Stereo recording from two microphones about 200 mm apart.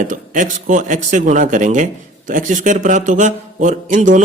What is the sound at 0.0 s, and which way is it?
Speech, 40° right (ahead or behind).